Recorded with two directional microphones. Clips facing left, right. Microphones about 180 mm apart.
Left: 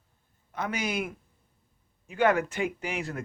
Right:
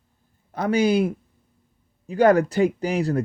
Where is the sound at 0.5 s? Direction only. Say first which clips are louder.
Right 11 dB; 35° right (ahead or behind).